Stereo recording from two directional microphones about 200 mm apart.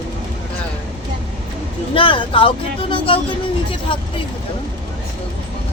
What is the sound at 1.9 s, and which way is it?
Speech, 25° left (ahead or behind).